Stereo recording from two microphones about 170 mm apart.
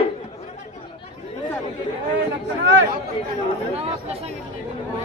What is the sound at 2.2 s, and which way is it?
Speech, 90° right.